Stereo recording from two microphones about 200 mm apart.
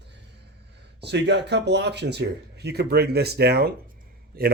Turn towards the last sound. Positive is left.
turn(degrees=-50)  # may be behind; listen again after turning